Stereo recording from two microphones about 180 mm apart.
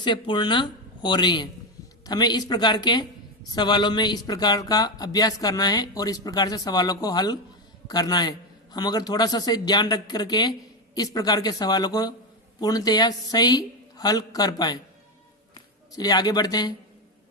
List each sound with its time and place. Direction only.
0.0 s speech: 25° left (ahead or behind)